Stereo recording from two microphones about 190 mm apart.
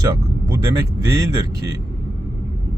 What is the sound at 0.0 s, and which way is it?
Vehicle, 20° right (ahead or behind).